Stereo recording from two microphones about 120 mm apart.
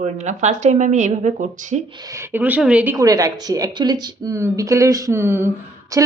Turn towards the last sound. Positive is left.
turn(degrees=-25)  # may be behind; listen again after turning